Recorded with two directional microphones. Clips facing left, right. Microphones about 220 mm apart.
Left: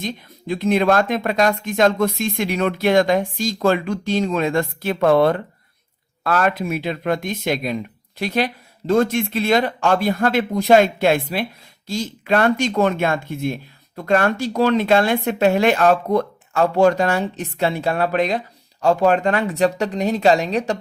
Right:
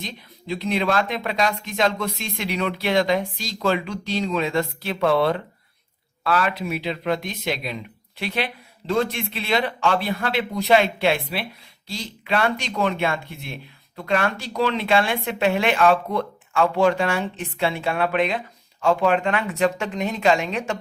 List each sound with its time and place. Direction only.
0.0 s speech: 50° left (ahead or behind)